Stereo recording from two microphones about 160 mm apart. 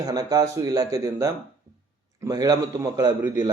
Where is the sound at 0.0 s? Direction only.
25° right (ahead or behind).